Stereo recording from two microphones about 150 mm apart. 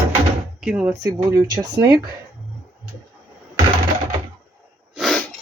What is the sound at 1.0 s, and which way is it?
Speech, 25° right (ahead or behind).